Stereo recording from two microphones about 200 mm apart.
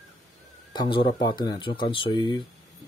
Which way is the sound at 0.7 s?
25° left (ahead or behind).